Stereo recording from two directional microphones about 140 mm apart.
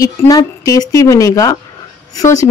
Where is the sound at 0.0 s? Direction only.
25° left (ahead or behind).